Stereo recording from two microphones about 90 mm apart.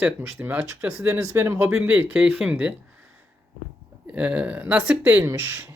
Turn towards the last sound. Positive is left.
turn(degrees=-20)  # may be behind; listen again after turning